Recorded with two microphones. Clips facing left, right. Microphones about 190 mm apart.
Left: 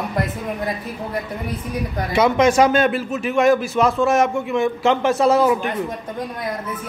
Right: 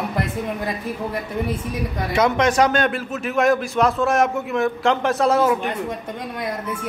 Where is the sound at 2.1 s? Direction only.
5° left (ahead or behind).